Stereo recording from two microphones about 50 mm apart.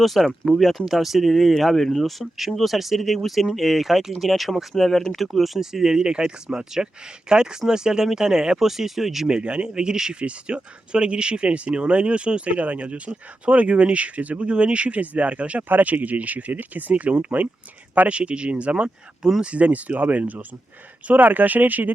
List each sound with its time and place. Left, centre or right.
0.0 s speech: centre
9.3 s speech: right
18.1 s speech: right